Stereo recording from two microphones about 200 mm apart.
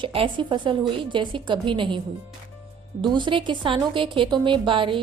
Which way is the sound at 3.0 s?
25° right (ahead or behind).